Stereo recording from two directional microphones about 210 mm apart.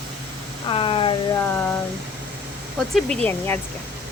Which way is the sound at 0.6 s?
25° left (ahead or behind).